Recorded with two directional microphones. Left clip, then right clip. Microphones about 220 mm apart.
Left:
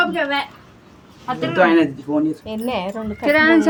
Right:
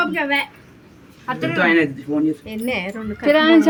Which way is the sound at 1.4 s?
30° right (ahead or behind).